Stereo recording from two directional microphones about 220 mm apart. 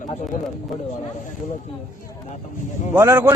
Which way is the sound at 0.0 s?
35° left (ahead or behind).